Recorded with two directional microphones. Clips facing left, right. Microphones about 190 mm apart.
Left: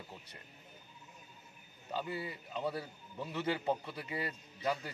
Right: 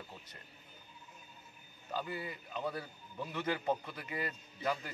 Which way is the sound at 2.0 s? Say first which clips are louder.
Left 1 dB; 25° left (ahead or behind).